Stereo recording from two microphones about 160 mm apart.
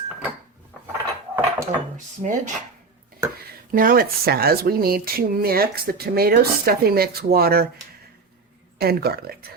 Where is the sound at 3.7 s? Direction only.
60° right (ahead or behind).